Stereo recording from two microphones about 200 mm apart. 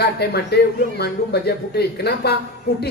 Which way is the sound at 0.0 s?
55° left (ahead or behind).